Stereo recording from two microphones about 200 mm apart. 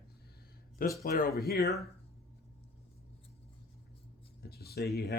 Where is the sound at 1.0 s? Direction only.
45° left (ahead or behind).